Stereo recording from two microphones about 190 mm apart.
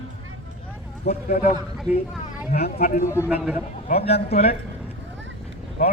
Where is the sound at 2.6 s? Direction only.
55° left (ahead or behind).